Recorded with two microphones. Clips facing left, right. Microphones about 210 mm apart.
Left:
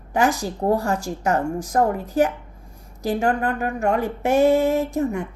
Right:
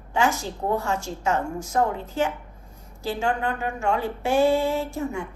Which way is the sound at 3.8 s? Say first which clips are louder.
Left 4 dB; 55° left (ahead or behind).